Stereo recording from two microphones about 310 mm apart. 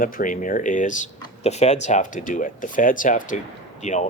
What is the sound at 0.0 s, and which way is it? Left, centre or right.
Speech, left.